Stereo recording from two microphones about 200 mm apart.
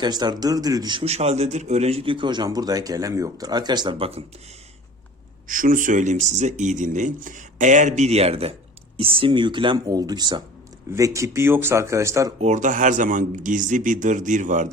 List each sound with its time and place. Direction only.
0.0 s speech: 20° right (ahead or behind)
5.5 s speech: 45° right (ahead or behind); by 12.3 s 15° right (ahead or behind)
12.4 s speech: 35° right (ahead or behind)